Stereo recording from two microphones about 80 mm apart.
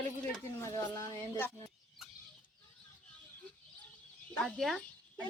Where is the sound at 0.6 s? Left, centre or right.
Left.